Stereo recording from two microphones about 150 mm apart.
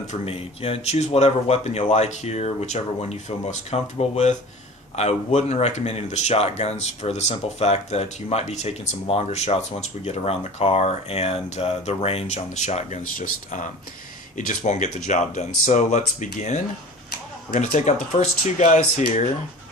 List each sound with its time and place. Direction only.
0.1 s speech: 40° left (ahead or behind)
17.6 s speech: 55° left (ahead or behind)